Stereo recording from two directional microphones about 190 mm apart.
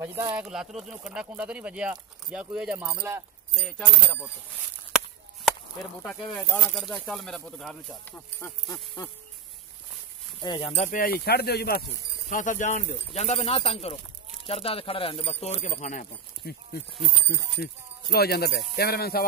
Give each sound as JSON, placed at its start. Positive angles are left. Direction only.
{"t": 0.0, "sound": "speech", "side_deg": -10}
{"t": 3.6, "sound": "speech", "side_deg": 5}
{"t": 6.0, "sound": "speech", "side_deg": 5}
{"t": 8.4, "sound": "a sound", "side_deg": 15}
{"t": 10.4, "sound": "speech", "side_deg": 20}
{"t": 10.7, "sound": "speech", "side_deg": 40}
{"t": 12.3, "sound": "speech", "side_deg": 45}